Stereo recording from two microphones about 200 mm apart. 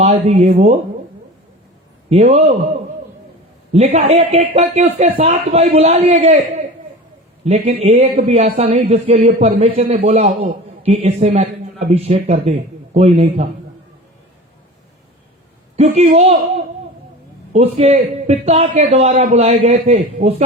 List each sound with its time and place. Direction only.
0.0 s a man's voice: 35° right (ahead or behind)
2.0 s a man's voice: 30° right (ahead or behind)
3.7 s a man's voice: 30° right (ahead or behind)
15.7 s a man's voice: 30° right (ahead or behind)